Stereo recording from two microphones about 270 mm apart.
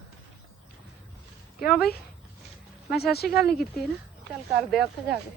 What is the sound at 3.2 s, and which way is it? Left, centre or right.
Speech, centre.